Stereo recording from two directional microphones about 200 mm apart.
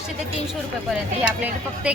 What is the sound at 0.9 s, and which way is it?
Speech, 5° right (ahead or behind).